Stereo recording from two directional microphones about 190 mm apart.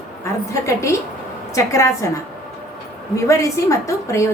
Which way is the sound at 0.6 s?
15° left (ahead or behind).